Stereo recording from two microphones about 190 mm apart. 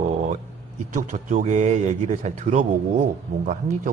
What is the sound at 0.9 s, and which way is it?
A man's voice, 40° right (ahead or behind).